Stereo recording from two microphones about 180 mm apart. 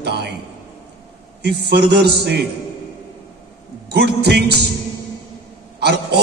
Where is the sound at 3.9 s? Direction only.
65° right (ahead or behind).